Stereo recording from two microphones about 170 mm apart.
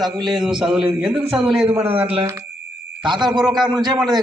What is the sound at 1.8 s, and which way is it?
A man's voice, 35° right (ahead or behind).